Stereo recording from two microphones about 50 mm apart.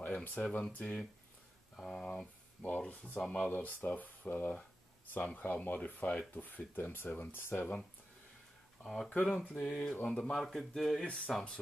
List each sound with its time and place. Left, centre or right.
0.0 s speech: left
1.8 s speech: centre
3.3 s speech: left
3.5 s speech: left
8.8 s speech: centre
9.1 s speech: left
10.3 s speech: centre